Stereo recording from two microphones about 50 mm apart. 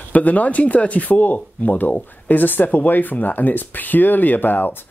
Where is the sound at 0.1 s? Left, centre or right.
Left.